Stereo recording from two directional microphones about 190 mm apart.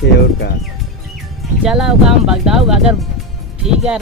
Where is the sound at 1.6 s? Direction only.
5° right (ahead or behind).